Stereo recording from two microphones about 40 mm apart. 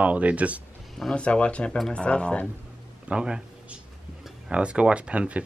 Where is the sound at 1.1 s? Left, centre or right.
Left.